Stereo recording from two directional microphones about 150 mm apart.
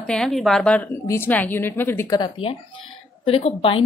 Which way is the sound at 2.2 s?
35° left (ahead or behind).